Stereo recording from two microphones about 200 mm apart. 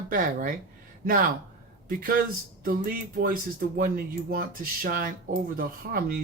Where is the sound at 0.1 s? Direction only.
45° right (ahead or behind).